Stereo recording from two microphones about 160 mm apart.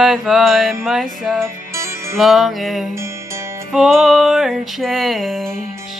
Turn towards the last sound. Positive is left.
turn(degrees=0)  # may be behind; listen again after turning